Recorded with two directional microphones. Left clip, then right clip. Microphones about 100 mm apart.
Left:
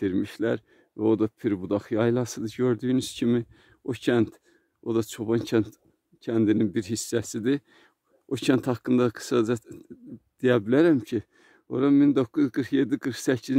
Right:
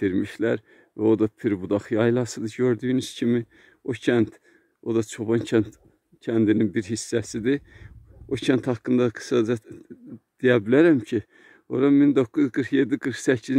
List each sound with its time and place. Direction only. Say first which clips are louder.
0.0 s speech: right 3 dB; 20° left (ahead or behind)
10.6 s speech: right 3 dB; 15° left (ahead or behind)